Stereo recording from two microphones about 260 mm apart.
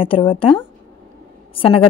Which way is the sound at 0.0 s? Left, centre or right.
Centre.